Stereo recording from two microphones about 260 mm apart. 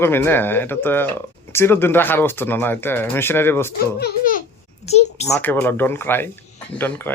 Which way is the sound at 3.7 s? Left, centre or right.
Left.